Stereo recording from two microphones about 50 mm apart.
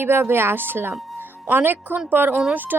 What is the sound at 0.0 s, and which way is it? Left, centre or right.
Speech, right.